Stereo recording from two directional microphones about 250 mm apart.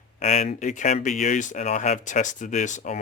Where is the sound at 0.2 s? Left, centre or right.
Left.